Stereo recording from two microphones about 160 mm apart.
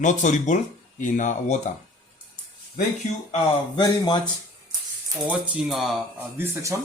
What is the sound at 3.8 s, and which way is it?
Speech, 25° left (ahead or behind).